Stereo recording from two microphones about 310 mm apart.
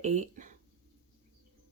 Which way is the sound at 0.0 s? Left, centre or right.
Right.